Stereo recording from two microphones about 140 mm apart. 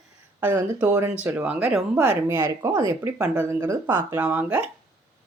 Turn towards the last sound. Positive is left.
turn(degrees=-15)  # may be behind; listen again after turning